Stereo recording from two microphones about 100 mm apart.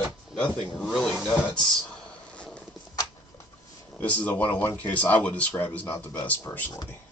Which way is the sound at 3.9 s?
15° left (ahead or behind).